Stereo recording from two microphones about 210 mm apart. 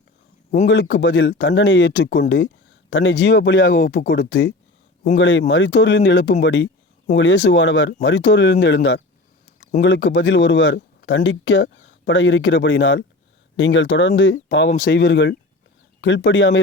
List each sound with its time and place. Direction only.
0.7 s speech: 60° left (ahead or behind)
3.7 s speech: 45° left (ahead or behind)
4.2 s speech: 60° left (ahead or behind)